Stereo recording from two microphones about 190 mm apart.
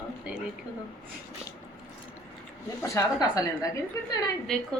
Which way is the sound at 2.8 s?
15° left (ahead or behind).